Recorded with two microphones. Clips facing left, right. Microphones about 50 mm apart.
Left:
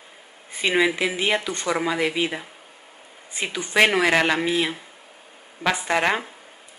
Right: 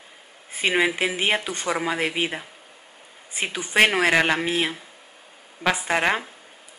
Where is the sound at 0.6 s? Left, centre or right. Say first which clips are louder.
Left 1 dB; centre.